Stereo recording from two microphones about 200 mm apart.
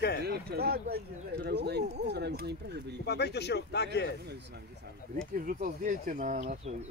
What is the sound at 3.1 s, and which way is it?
Speech, 55° left (ahead or behind).